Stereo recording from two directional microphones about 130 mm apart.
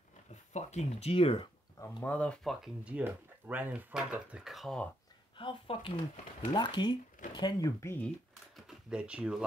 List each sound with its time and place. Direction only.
0.3 s speech: 60° left (ahead or behind)
1.8 s speech: 20° left (ahead or behind)
2.1 s speech: 10° left (ahead or behind)
2.8 s speech: 10° right (ahead or behind)
5.3 s speech: 40° left (ahead or behind); by 8.0 s 25° left (ahead or behind)
8.5 s a sound: 5° right (ahead or behind)